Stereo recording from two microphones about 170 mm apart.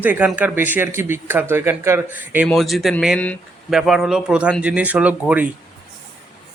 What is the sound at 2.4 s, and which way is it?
A man's voice, centre (ahead or behind).